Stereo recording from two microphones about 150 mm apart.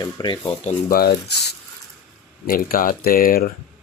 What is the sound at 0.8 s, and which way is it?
Speech, 90° left.